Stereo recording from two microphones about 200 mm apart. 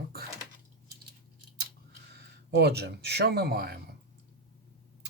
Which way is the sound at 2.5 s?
55° right (ahead or behind).